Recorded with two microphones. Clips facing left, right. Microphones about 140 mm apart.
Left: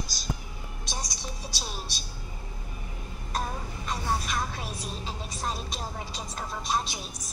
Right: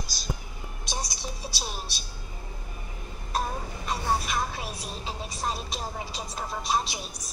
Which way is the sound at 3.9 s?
10° right (ahead or behind).